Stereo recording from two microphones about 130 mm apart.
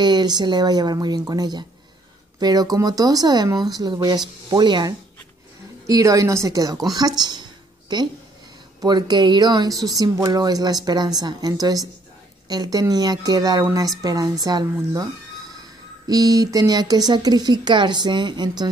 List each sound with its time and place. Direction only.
0.0 s a woman's voice: 35° right (ahead or behind)
16.1 s speech: 30° right (ahead or behind)